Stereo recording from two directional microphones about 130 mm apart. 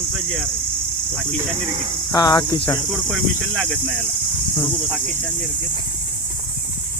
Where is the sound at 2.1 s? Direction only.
30° left (ahead or behind).